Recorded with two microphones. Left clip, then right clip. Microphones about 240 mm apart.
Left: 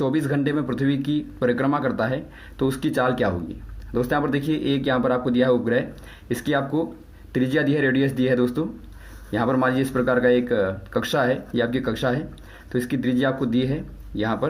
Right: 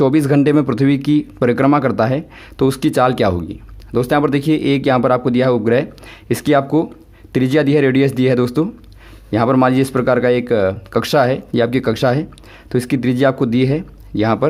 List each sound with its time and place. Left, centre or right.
0.0 s a man's voice: right